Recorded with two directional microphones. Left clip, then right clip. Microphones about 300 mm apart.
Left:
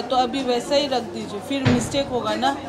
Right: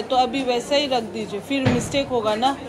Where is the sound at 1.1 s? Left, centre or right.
Left.